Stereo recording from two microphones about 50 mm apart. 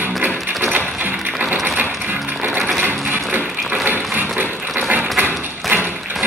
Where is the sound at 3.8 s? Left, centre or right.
Right.